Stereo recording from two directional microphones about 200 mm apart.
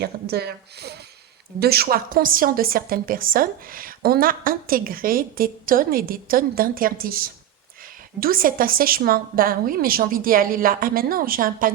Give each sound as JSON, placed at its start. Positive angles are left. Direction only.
{"t": 0.0, "sound": "a woman's voice", "side_deg": -55}